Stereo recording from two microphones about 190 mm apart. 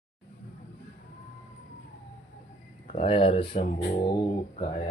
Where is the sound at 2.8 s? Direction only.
35° left (ahead or behind).